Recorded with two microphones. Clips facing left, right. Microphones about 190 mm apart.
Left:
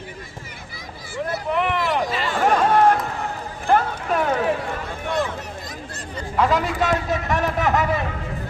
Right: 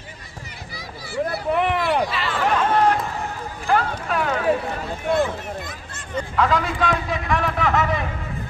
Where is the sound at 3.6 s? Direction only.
45° left (ahead or behind).